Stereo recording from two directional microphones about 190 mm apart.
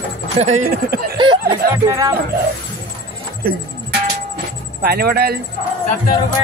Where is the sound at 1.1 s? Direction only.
25° right (ahead or behind).